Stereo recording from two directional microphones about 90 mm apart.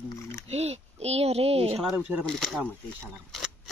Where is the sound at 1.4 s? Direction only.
90° right.